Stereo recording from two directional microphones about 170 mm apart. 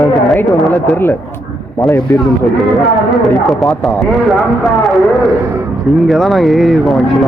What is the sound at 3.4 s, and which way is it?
Speech, centre (ahead or behind).